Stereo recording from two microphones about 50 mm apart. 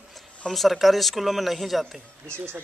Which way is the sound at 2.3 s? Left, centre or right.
Right.